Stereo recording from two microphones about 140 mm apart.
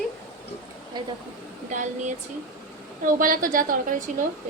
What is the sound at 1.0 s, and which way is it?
Speech, 35° right (ahead or behind).